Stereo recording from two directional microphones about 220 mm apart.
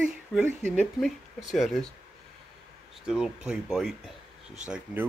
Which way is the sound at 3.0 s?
Centre (ahead or behind).